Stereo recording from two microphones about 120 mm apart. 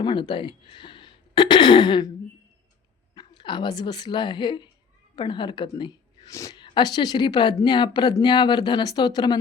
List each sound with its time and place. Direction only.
0.0 s speech: 40° left (ahead or behind)
3.2 s a woman's voice: 40° left (ahead or behind)